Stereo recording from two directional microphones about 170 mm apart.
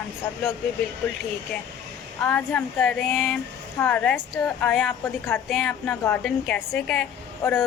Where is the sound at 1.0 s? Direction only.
10° left (ahead or behind).